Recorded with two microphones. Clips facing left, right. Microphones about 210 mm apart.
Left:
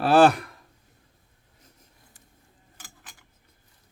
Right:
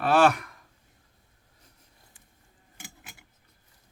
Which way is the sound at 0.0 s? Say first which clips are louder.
Left 4 dB; 35° left (ahead or behind).